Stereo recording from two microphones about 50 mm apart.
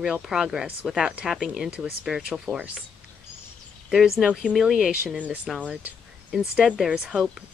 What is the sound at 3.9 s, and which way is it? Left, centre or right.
Speech, centre.